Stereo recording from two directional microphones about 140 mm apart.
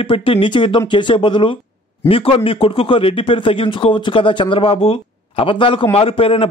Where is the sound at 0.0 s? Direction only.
40° left (ahead or behind).